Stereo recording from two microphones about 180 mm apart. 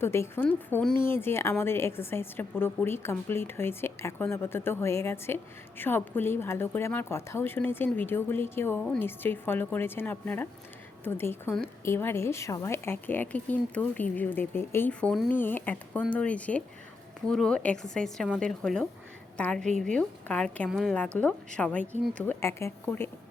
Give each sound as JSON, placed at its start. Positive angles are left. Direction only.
{"t": 0.0, "sound": "a woman's voice", "side_deg": 15}